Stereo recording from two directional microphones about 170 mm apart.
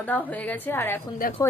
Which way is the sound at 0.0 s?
10° left (ahead or behind).